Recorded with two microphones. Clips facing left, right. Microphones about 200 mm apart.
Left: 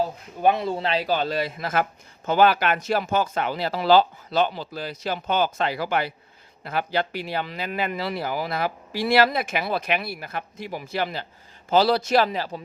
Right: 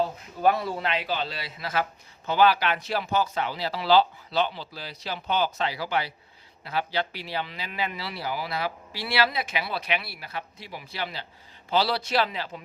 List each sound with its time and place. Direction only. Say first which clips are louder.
0.4 s a man's voice: left 2 dB; 20° left (ahead or behind); by 12.6 s 40° left (ahead or behind)